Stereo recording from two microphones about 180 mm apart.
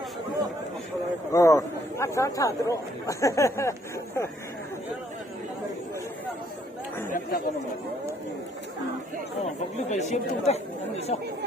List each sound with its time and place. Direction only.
1.3 s speech: 20° left (ahead or behind)
7.1 s speech: 50° left (ahead or behind)
9.9 s speech: 40° left (ahead or behind)